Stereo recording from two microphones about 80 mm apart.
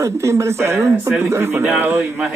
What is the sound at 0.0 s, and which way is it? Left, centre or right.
A man's voice, right.